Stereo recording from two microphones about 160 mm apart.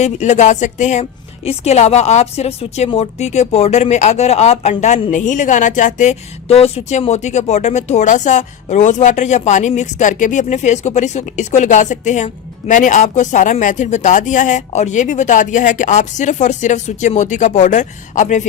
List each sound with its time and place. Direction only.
0.0 s a woman's voice: 45° left (ahead or behind)